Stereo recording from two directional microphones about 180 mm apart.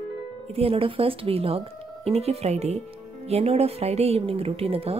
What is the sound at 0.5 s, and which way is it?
Speech, 30° right (ahead or behind).